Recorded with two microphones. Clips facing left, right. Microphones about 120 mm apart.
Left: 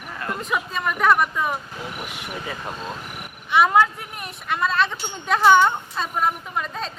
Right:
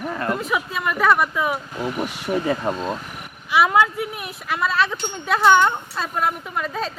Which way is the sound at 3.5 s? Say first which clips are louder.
Even; centre (ahead or behind).